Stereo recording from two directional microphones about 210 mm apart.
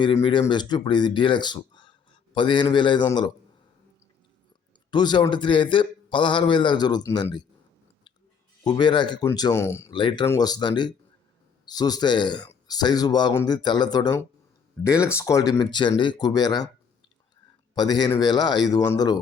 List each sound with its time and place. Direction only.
0.0 s speech: 25° left (ahead or behind)
4.9 s speech: 20° left (ahead or behind)
8.6 s speech: 20° left (ahead or behind)
10.0 s speech: 25° left (ahead or behind)
17.7 s speech: 20° left (ahead or behind)